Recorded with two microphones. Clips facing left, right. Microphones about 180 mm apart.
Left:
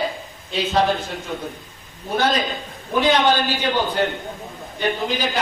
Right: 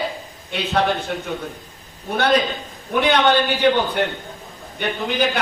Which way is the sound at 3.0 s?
60° right (ahead or behind).